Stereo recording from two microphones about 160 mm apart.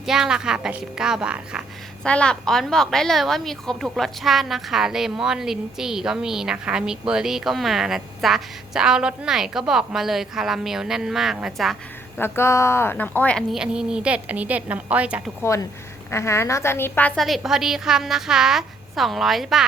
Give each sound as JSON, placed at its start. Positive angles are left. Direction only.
{"t": 0.0, "sound": "a woman's voice", "side_deg": -5}
{"t": 2.0, "sound": "a woman's voice", "side_deg": 5}
{"t": 12.2, "sound": "a woman's voice", "side_deg": 15}
{"t": 15.4, "sound": "a woman's voice", "side_deg": 20}